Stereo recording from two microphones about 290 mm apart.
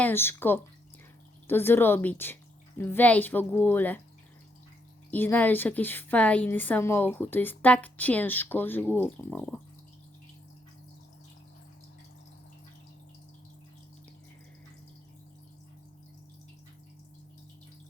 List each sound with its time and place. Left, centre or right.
0.0 s a woman's voice: centre
5.1 s a woman's voice: centre